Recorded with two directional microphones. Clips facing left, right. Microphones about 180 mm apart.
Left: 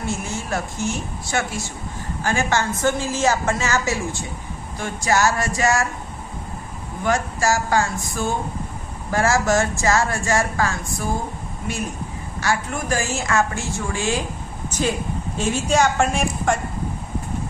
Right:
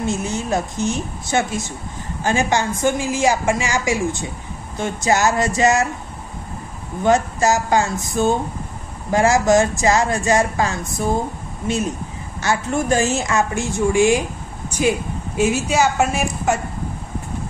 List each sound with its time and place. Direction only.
0.0 s a woman's voice: 20° right (ahead or behind)
7.1 s speech: 20° right (ahead or behind)
12.4 s a woman's voice: 25° right (ahead or behind); by 16.5 s 5° right (ahead or behind)